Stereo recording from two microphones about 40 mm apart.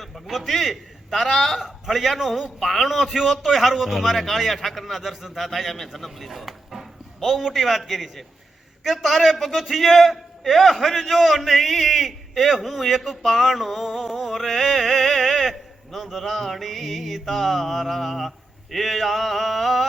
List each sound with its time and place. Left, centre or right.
0.0 s a man's voice: centre